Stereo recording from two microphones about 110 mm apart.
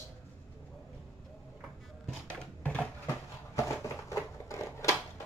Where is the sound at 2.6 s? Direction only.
15° left (ahead or behind).